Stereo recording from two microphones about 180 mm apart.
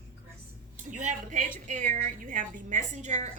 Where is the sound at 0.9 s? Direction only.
45° right (ahead or behind).